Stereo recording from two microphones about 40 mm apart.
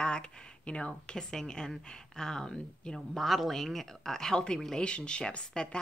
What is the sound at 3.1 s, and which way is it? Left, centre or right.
A woman's voice, centre.